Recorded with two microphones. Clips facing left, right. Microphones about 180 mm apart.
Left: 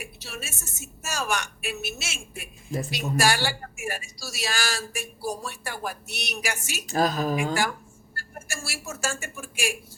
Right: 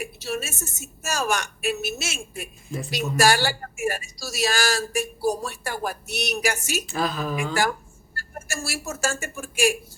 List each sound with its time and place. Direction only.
0.0 s a woman's voice: 40° right (ahead or behind)
6.8 s a woman's voice: 40° left (ahead or behind)
8.1 s speech: 45° right (ahead or behind)